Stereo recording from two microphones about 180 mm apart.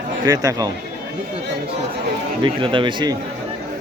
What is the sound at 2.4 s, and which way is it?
Speech, 25° right (ahead or behind).